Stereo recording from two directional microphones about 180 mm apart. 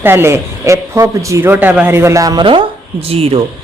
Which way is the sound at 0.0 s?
15° right (ahead or behind).